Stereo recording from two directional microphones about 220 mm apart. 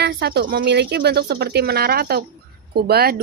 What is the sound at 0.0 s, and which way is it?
Speech, 50° right (ahead or behind).